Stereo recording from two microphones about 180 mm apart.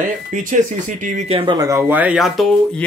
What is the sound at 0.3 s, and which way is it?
Speech, 45° right (ahead or behind).